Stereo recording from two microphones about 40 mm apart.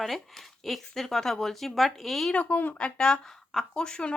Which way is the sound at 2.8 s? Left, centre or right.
Centre.